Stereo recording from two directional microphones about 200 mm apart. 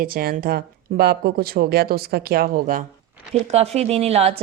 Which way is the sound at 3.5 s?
30° right (ahead or behind).